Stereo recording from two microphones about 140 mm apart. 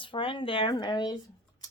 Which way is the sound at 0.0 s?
40° left (ahead or behind).